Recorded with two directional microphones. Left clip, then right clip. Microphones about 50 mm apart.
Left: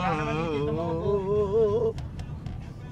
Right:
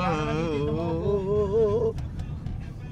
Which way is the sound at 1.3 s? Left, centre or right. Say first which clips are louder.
Even; right.